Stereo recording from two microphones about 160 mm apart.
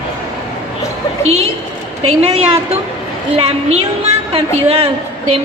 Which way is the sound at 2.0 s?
40° right (ahead or behind).